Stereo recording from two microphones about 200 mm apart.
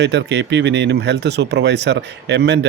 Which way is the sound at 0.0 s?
60° right (ahead or behind).